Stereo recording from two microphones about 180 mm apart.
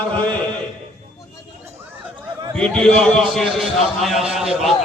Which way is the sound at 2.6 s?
5° left (ahead or behind).